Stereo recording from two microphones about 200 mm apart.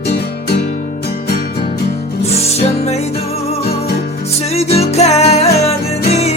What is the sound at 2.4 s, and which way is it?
Music, 30° left (ahead or behind).